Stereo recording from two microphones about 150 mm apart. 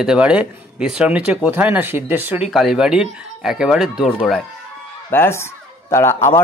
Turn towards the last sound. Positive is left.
turn(degrees=15)  # may be behind; listen again after turning